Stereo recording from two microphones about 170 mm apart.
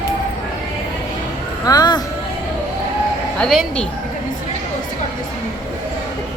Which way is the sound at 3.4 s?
Centre (ahead or behind).